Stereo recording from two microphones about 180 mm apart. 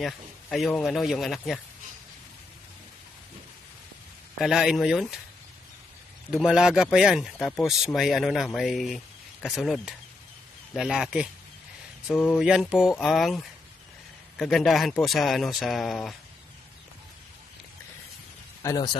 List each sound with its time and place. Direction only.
0.0 s a man's voice: centre (ahead or behind)
4.4 s speech: centre (ahead or behind)
6.3 s speech: 5° right (ahead or behind)
18.6 s speech: 20° left (ahead or behind)